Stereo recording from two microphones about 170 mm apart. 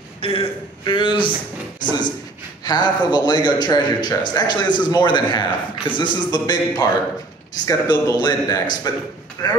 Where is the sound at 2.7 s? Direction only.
25° left (ahead or behind).